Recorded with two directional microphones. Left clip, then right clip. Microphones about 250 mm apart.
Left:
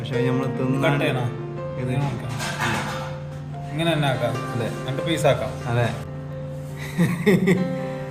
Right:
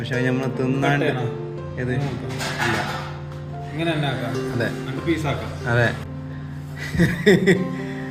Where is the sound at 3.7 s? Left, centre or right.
Left.